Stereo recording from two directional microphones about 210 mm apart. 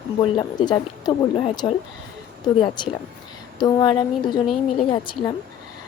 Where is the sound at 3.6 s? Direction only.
20° left (ahead or behind).